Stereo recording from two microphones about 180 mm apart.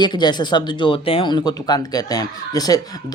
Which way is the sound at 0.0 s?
25° left (ahead or behind).